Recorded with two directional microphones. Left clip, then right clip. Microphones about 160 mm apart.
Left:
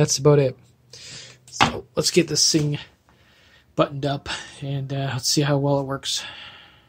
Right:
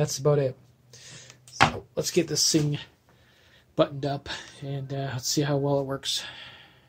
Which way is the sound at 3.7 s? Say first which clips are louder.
Left 3 dB; 15° left (ahead or behind).